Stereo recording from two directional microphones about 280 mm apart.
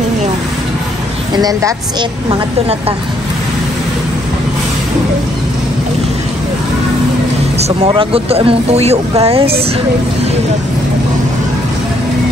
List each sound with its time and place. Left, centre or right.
1.3 s a woman's voice: centre
7.5 s speech: right